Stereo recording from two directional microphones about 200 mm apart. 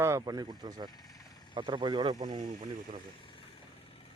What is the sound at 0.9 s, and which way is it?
Vehicle, 20° left (ahead or behind).